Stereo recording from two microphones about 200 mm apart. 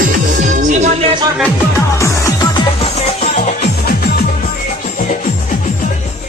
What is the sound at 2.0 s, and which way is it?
Music, 15° left (ahead or behind).